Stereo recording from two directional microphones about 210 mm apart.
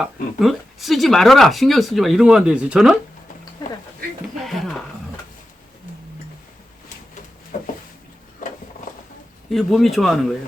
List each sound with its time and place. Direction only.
0.0 s speech: centre (ahead or behind)
4.4 s speech: centre (ahead or behind)
7.5 s a sound: 40° left (ahead or behind)
9.5 s speech: centre (ahead or behind)